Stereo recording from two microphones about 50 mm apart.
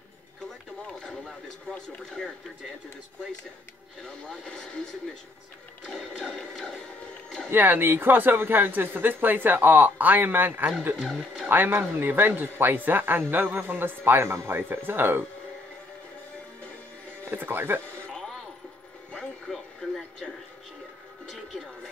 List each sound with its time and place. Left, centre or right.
2.0 s music: centre
4.0 s music: centre
5.9 s music: centre
7.5 s speech: right
11.0 s music: centre
11.4 s speech: right
14.3 s a man's voice: right
14.7 s speech: right
17.2 s speech: right
19.5 s music: centre